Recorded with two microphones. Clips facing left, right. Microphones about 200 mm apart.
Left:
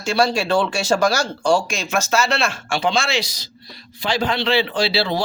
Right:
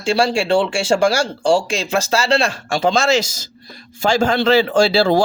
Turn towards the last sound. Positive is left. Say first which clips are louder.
# right 7 dB
turn(degrees=-45)  # may be behind; listen again after turning